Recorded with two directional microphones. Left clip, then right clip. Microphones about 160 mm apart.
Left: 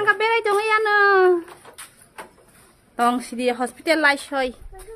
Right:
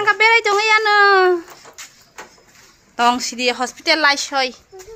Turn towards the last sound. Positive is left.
turn(degrees=25)  # may be behind; listen again after turning